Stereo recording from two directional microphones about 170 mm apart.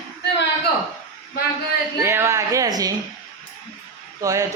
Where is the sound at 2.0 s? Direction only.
15° right (ahead or behind).